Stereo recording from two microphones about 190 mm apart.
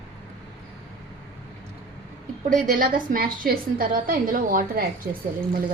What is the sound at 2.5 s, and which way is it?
A woman's voice, 45° right (ahead or behind).